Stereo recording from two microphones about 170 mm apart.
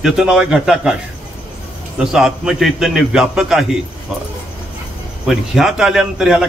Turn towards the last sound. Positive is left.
turn(degrees=-5)  # may be behind; listen again after turning